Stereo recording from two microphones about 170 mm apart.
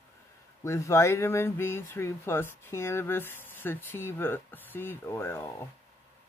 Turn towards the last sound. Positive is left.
turn(degrees=15)  # may be behind; listen again after turning